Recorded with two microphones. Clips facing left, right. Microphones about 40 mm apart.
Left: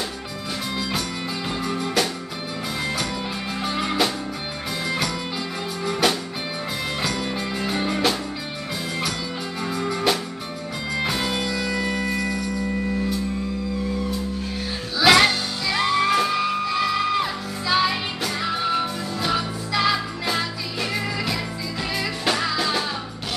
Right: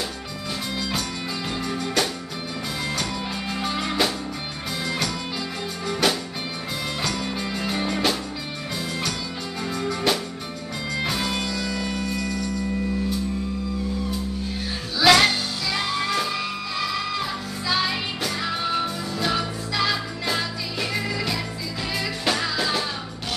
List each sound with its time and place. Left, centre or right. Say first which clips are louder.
1.6 s music: left 1 dB; centre
3.5 s music: left 2 dB; centre
9.6 s music: left 1 dB; centre
15.0 s music: left 1 dB; centre
15.8 s music: left 7 dB; centre